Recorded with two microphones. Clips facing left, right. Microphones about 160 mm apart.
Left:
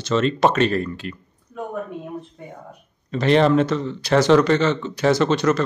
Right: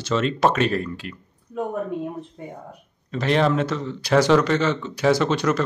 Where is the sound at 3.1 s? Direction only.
5° right (ahead or behind).